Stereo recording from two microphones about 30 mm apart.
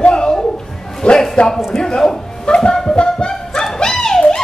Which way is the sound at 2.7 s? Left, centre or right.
Centre.